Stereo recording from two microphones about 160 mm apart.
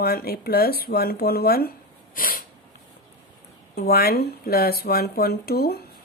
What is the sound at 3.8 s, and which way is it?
Speech, 75° left (ahead or behind).